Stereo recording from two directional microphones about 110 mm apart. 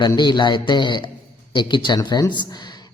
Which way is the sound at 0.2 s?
45° left (ahead or behind).